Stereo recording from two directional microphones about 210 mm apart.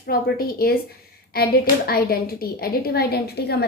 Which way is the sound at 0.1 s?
45° left (ahead or behind).